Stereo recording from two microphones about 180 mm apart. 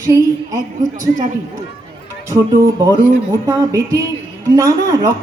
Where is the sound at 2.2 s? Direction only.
20° right (ahead or behind).